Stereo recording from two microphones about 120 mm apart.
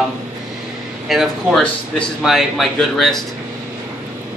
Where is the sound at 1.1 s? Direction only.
Centre (ahead or behind).